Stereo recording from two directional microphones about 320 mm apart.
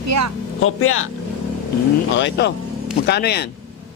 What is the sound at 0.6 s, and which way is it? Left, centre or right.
Speech, left.